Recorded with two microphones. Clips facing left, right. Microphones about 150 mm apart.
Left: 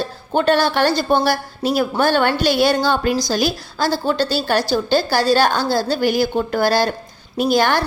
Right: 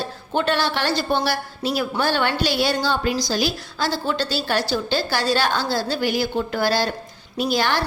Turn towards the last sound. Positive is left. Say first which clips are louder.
# left 5 dB
turn(degrees=50)  # may be behind; listen again after turning